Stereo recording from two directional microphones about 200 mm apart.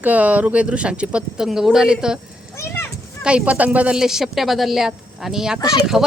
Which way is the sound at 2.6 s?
10° left (ahead or behind).